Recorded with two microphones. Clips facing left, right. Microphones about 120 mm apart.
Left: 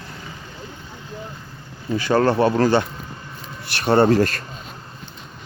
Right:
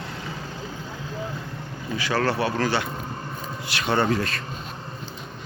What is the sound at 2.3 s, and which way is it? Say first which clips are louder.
Speech: left 7 dB; 40° left (ahead or behind).